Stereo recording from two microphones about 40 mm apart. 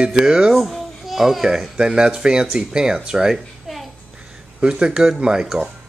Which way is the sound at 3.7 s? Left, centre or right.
Centre.